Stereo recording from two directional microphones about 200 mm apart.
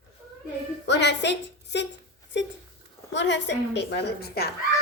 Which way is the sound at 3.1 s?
60° left (ahead or behind).